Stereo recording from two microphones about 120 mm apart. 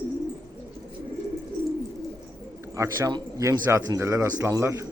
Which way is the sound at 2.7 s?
25° right (ahead or behind).